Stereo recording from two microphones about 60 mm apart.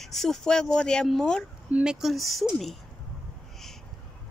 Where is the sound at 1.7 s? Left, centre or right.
Right.